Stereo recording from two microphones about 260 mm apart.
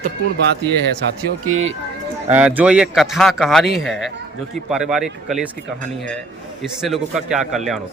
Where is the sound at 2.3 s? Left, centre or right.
Centre.